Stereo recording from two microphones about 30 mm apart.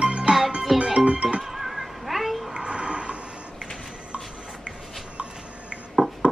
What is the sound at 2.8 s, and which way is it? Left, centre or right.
Mechanisms, right.